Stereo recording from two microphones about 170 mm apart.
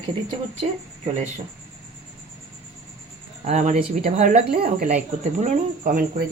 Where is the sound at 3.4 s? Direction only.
45° right (ahead or behind).